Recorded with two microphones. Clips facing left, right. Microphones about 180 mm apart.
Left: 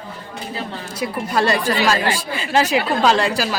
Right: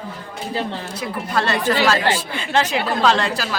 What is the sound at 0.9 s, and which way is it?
Speech, 10° left (ahead or behind).